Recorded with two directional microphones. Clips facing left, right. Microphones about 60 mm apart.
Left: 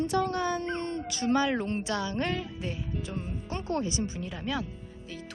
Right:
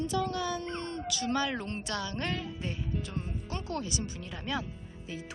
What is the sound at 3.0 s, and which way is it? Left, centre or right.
Speech, centre.